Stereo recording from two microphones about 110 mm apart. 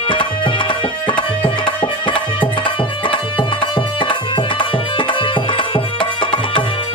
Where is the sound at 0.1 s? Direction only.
50° left (ahead or behind).